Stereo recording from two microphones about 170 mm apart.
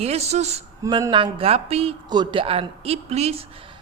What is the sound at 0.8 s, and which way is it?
A woman's voice, 25° right (ahead or behind).